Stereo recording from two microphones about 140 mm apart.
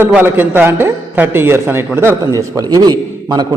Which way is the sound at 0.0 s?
15° right (ahead or behind).